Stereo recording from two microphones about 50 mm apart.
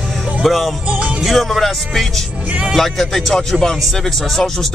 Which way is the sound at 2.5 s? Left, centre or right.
Right.